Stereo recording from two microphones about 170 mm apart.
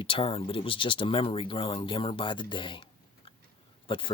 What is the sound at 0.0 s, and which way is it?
Speech, 30° left (ahead or behind).